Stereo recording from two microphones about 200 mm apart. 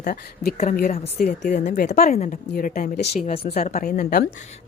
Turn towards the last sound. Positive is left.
turn(degrees=45)  # may be behind; listen again after turning